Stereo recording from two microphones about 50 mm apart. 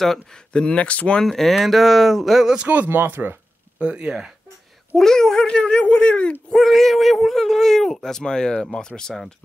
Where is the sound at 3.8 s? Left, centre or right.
Right.